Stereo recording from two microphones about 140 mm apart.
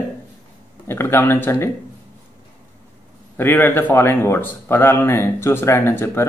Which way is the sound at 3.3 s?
15° left (ahead or behind).